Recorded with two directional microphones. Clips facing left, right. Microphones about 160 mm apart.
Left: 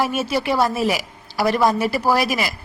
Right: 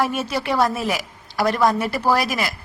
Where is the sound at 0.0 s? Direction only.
10° left (ahead or behind).